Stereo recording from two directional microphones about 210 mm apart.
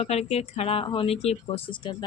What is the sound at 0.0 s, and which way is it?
Speech, 30° left (ahead or behind).